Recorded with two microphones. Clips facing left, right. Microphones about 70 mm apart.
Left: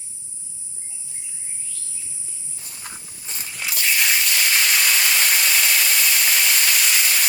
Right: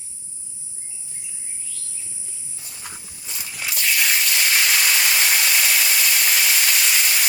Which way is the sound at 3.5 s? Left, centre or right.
Centre.